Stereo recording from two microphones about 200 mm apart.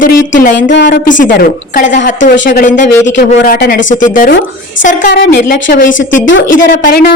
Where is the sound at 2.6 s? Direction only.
40° left (ahead or behind).